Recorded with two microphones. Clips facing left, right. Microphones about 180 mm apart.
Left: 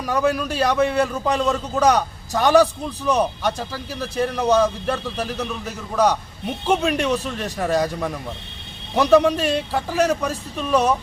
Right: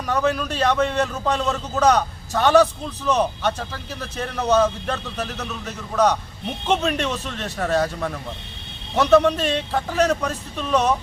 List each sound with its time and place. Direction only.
0.1 s a man's voice: 10° left (ahead or behind)